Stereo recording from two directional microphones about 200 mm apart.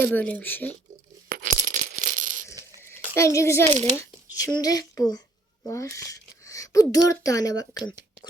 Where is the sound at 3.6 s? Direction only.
30° right (ahead or behind).